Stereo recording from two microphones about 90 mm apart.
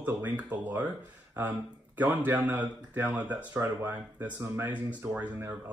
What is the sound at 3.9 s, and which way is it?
Speech, 15° right (ahead or behind).